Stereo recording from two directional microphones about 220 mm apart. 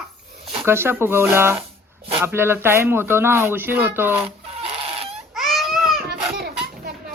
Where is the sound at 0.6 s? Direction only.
10° right (ahead or behind).